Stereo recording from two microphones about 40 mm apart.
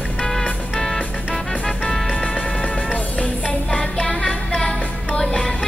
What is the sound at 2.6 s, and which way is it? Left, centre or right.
Music, left.